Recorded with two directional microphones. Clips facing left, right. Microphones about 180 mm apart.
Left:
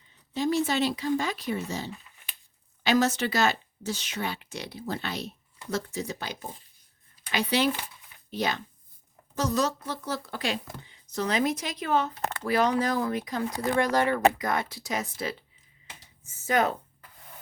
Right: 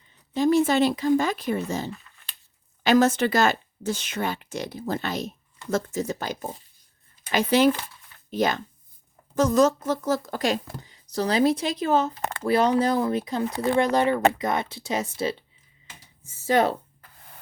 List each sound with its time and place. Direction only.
0.3 s speech: 50° right (ahead or behind); by 16.7 s 30° right (ahead or behind)